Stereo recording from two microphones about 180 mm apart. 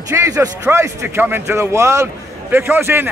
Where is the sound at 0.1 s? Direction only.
15° right (ahead or behind).